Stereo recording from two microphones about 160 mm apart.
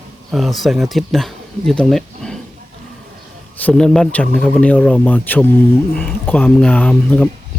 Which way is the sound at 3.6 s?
5° left (ahead or behind).